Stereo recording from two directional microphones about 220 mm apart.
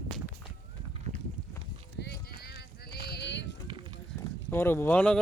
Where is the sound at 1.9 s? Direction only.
50° left (ahead or behind).